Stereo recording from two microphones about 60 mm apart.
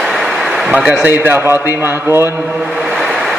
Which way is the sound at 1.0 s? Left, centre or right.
Right.